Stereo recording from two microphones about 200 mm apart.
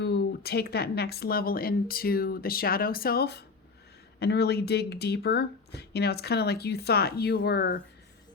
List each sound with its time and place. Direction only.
0.0 s speech: 55° left (ahead or behind)